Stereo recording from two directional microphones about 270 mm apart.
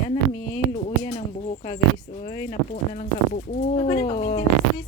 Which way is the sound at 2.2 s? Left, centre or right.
Left.